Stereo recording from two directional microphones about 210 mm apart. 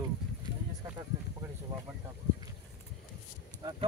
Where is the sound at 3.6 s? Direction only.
20° right (ahead or behind).